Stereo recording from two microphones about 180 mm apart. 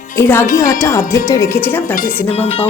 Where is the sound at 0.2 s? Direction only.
15° left (ahead or behind).